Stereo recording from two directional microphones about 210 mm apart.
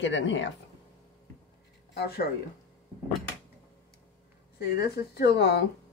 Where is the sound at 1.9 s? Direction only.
50° left (ahead or behind).